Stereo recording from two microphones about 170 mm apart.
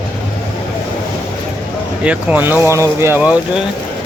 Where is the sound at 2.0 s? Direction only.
5° right (ahead or behind).